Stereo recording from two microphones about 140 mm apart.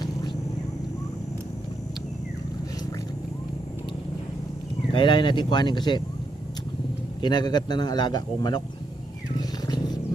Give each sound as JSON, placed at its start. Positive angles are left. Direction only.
{"t": 4.9, "sound": "a man's voice", "side_deg": 35}
{"t": 7.2, "sound": "a man's voice", "side_deg": 30}
{"t": 9.4, "sound": "wild animals", "side_deg": 30}